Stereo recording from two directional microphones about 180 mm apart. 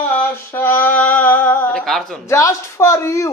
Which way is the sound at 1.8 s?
Centre (ahead or behind).